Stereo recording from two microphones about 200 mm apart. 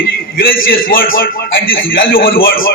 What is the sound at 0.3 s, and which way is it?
A man's voice, 45° left (ahead or behind).